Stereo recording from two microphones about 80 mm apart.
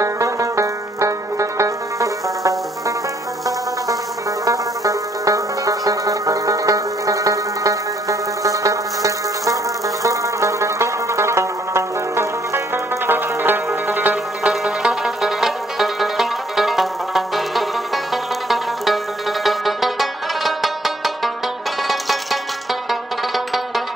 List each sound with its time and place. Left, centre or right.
0.0 s banjo: right
4.5 s music: right
14.5 s music: centre